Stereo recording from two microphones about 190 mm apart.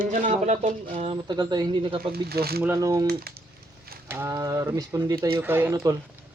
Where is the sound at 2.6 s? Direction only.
15° right (ahead or behind).